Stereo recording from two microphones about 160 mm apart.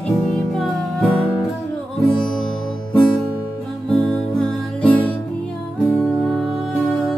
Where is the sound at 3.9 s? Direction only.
5° left (ahead or behind).